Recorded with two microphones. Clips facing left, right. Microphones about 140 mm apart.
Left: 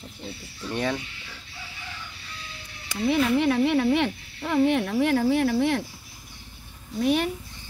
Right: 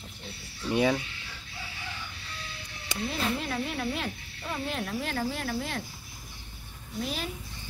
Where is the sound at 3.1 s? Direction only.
70° left (ahead or behind).